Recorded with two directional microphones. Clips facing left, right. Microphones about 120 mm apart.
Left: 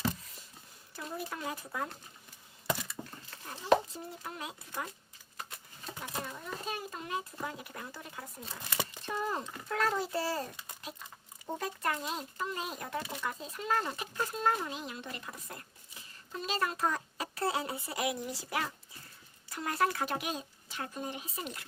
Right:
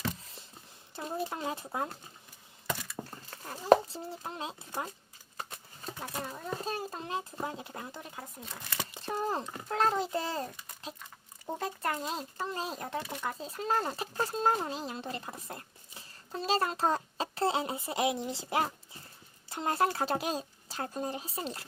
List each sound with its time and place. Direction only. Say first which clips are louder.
0.9 s a child's voice: right 4 dB; 25° right (ahead or behind)
3.2 s a child's voice: right 4 dB; 40° right (ahead or behind); by 10.4 s 20° right (ahead or behind)
11.6 s speech: right 1 dB; 30° right (ahead or behind)